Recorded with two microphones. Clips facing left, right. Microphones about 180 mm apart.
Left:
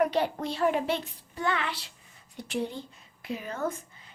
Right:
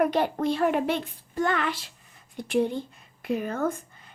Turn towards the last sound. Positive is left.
turn(degrees=-55)  # may be behind; listen again after turning